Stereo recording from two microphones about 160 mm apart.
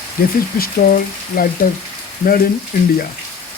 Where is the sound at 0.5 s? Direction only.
65° left (ahead or behind).